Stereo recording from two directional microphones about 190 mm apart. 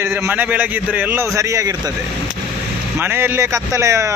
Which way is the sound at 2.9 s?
10° right (ahead or behind).